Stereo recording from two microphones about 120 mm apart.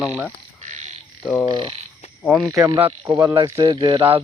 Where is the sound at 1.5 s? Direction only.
40° right (ahead or behind).